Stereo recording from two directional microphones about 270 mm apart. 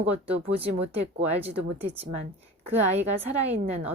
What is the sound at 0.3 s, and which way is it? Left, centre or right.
Speech, right.